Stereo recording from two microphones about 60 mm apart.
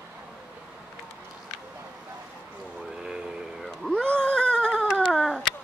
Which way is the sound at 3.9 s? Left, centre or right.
Centre.